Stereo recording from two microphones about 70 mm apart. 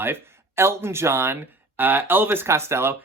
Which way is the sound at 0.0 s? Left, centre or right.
Right.